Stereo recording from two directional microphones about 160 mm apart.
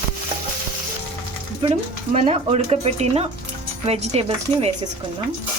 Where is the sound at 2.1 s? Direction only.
40° right (ahead or behind).